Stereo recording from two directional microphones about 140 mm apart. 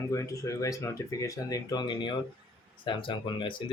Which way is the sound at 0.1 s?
25° left (ahead or behind).